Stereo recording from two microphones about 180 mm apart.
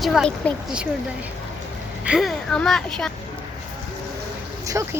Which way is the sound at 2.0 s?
Centre (ahead or behind).